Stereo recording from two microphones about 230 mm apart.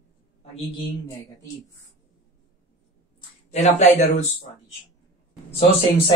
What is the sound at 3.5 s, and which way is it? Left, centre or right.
Speech, left.